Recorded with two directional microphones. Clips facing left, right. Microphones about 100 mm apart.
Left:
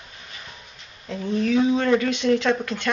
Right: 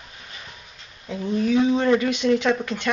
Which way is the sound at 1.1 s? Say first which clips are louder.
Right 1 dB; 5° right (ahead or behind).